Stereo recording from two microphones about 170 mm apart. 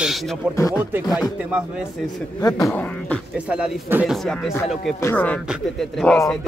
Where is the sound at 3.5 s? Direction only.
10° right (ahead or behind).